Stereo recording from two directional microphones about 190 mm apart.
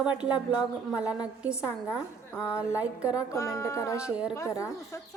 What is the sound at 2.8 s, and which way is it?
Speech, 5° right (ahead or behind).